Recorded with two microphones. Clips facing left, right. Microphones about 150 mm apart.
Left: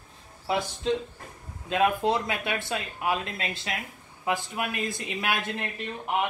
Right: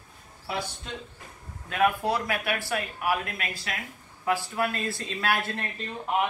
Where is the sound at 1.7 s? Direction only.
20° left (ahead or behind).